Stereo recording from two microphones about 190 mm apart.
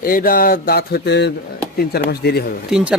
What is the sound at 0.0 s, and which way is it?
A man's voice, 50° left (ahead or behind).